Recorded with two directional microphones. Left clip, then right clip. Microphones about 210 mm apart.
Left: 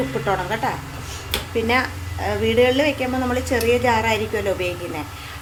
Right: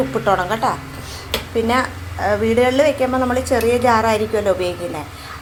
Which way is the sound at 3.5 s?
15° right (ahead or behind).